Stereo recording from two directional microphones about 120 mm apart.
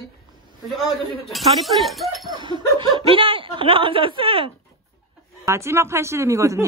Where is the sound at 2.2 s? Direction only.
40° right (ahead or behind).